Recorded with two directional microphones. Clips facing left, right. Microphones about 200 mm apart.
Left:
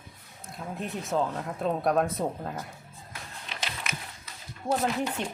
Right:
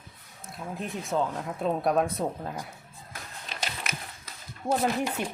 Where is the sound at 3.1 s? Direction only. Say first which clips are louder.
Right 1 dB; 45° right (ahead or behind).